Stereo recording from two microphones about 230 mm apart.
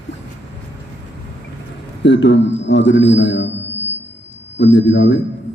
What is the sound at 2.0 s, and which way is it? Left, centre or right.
A man's voice, left.